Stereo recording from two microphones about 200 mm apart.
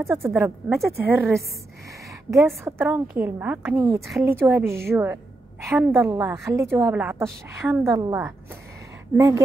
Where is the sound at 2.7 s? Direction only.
10° right (ahead or behind).